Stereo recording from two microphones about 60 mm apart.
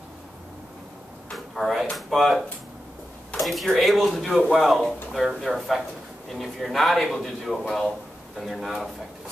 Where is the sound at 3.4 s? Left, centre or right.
Centre.